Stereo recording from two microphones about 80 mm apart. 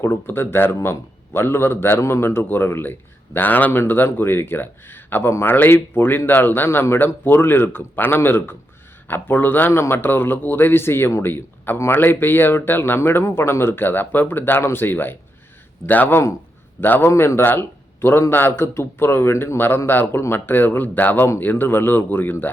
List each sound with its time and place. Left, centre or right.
0.0 s a man's voice: left